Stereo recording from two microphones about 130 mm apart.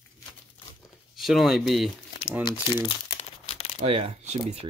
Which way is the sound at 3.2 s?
50° left (ahead or behind).